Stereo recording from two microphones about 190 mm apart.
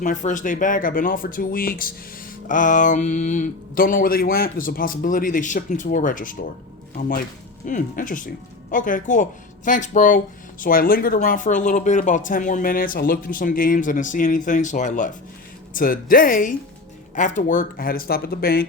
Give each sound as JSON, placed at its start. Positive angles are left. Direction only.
{"t": 0.0, "sound": "speech", "side_deg": 40}